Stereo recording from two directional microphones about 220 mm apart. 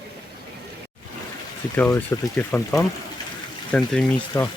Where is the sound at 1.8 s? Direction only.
10° left (ahead or behind).